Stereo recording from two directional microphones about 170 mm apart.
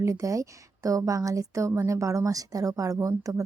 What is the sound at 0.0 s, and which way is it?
Speech, 20° right (ahead or behind).